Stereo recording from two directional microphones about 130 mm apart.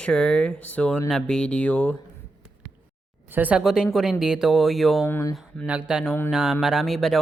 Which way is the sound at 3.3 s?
15° right (ahead or behind).